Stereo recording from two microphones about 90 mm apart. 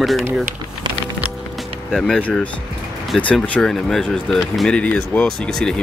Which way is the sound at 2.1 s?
15° left (ahead or behind).